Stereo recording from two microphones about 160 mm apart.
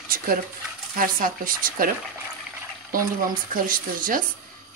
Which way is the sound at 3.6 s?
60° right (ahead or behind).